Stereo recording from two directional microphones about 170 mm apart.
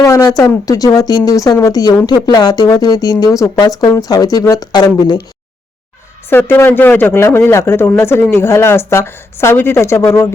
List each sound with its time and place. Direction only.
0.0 s speech: 20° left (ahead or behind)
6.3 s speech: 10° left (ahead or behind)